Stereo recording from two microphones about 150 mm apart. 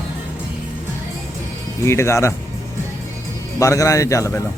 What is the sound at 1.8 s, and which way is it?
Speech, 20° left (ahead or behind).